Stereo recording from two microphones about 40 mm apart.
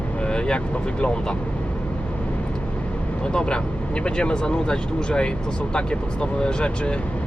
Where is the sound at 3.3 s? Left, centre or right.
Left.